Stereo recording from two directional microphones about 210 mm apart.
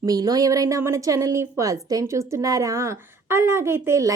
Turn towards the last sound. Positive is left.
turn(degrees=-15)  # may be behind; listen again after turning